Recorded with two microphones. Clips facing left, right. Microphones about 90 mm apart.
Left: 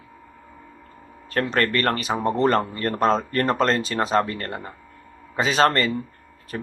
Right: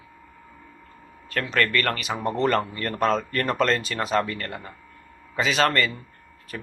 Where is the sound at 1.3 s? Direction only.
35° left (ahead or behind).